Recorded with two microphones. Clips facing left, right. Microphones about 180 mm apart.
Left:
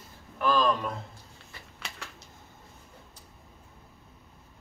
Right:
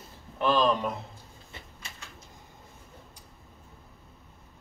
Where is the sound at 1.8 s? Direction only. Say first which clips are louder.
Left 5 dB; 70° left (ahead or behind).